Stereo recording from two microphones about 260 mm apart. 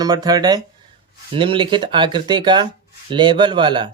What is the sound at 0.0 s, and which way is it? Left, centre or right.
Speech, centre.